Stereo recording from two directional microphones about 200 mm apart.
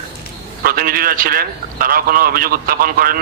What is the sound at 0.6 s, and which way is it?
A man's voice, 45° right (ahead or behind).